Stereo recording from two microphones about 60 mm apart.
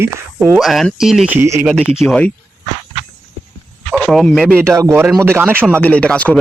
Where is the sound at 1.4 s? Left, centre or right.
Right.